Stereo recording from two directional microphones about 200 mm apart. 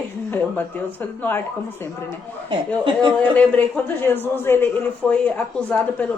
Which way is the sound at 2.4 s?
25° right (ahead or behind).